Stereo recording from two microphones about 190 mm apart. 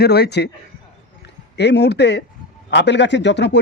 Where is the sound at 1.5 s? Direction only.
65° left (ahead or behind).